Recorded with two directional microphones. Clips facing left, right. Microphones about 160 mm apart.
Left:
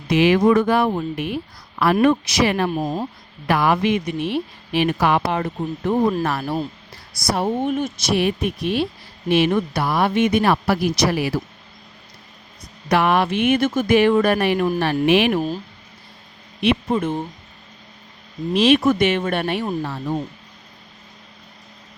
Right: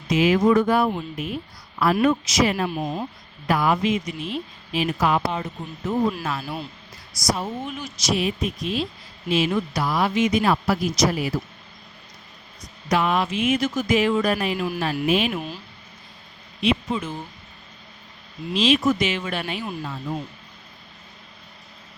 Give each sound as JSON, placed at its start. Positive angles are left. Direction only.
{"t": 0.1, "sound": "speech", "side_deg": 70}
{"t": 1.1, "sound": "speech", "side_deg": 70}
{"t": 2.6, "sound": "speech", "side_deg": 40}
{"t": 3.4, "sound": "speech", "side_deg": 70}
{"t": 12.9, "sound": "speech", "side_deg": 65}
{"t": 15.0, "sound": "speech", "side_deg": 70}
{"t": 15.4, "sound": "speech", "side_deg": 40}
{"t": 16.6, "sound": "speech", "side_deg": 60}
{"t": 18.5, "sound": "speech", "side_deg": 60}